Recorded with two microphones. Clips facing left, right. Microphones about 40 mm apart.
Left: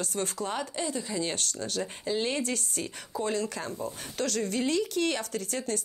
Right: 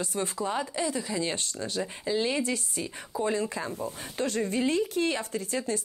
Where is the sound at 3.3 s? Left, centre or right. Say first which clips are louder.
Right 2 dB; right.